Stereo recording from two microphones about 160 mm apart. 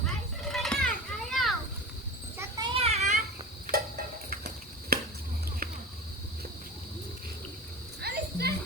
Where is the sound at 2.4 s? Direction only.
25° right (ahead or behind).